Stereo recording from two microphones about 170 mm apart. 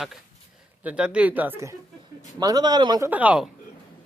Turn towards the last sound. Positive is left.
turn(degrees=-10)  # may be behind; listen again after turning